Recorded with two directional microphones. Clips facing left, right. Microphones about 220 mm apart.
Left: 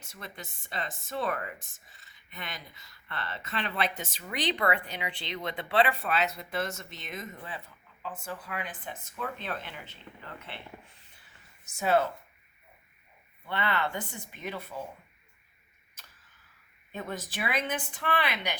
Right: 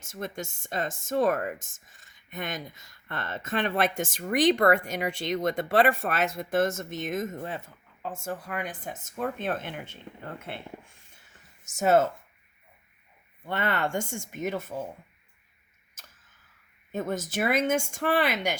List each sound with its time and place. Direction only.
0.0 s speech: 45° right (ahead or behind)
13.4 s speech: 45° right (ahead or behind)
16.9 s speech: 45° right (ahead or behind)